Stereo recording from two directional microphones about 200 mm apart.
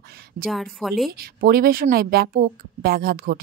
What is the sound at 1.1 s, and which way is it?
Speech, 50° right (ahead or behind).